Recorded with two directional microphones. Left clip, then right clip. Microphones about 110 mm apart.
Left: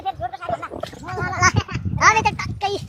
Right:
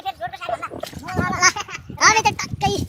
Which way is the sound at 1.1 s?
40° right (ahead or behind).